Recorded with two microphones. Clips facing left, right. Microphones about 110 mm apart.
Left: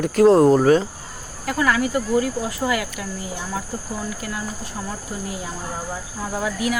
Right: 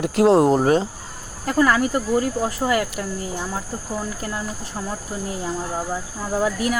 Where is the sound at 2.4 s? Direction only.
40° right (ahead or behind).